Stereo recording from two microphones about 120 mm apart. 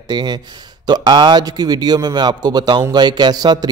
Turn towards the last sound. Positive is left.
turn(degrees=-35)  # may be behind; listen again after turning